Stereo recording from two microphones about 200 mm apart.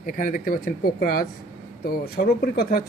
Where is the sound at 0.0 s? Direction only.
40° left (ahead or behind).